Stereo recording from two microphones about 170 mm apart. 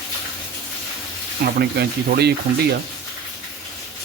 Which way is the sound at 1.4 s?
65° right (ahead or behind).